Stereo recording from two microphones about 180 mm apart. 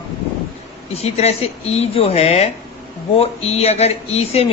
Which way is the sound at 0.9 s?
35° left (ahead or behind).